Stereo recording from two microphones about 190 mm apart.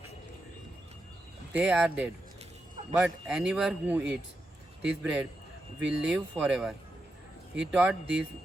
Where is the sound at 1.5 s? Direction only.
5° right (ahead or behind).